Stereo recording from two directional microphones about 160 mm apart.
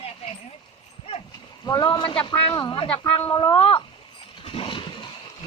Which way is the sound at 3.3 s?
25° left (ahead or behind).